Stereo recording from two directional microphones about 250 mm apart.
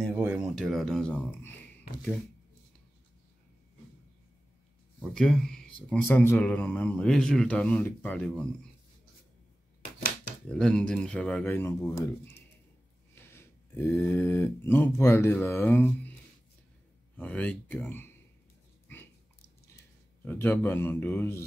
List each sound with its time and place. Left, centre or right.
0.1 s speech: centre
5.1 s speech: centre
9.8 s typewriter: left
10.5 s speech: centre
13.1 s speech: centre
17.2 s speech: centre
20.2 s a man's voice: centre